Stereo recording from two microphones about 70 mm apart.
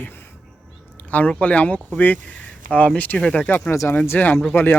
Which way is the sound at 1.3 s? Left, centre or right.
Centre.